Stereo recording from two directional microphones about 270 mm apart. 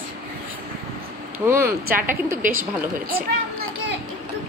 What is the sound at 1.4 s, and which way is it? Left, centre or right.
Speech, centre.